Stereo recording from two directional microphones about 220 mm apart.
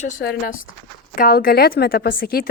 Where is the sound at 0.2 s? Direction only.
40° left (ahead or behind).